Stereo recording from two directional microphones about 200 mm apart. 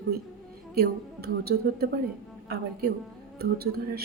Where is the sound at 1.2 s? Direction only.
50° right (ahead or behind).